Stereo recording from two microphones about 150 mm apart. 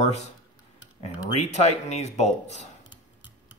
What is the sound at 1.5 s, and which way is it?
Speech, 50° left (ahead or behind).